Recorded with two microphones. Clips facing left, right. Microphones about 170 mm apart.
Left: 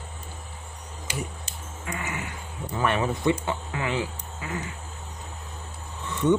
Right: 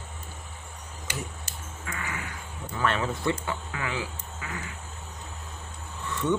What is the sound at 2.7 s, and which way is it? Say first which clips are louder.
Speech: left 3 dB; 15° left (ahead or behind).